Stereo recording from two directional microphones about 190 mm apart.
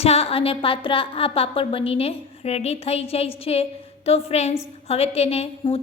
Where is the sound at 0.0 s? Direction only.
30° left (ahead or behind).